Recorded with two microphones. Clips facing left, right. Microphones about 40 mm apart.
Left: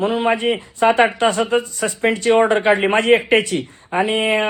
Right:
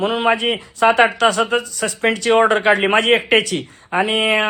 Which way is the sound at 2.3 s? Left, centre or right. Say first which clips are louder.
Right 1 dB; right.